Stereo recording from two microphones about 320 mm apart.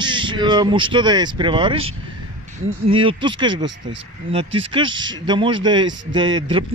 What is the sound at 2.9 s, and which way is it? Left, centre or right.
A man's voice, centre.